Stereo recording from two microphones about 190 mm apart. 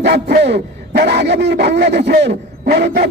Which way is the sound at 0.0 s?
55° right (ahead or behind).